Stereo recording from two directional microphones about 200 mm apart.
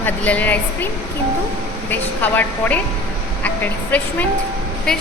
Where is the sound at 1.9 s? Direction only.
10° left (ahead or behind).